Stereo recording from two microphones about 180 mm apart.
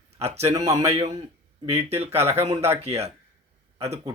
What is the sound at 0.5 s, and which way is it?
A man's voice, 20° right (ahead or behind).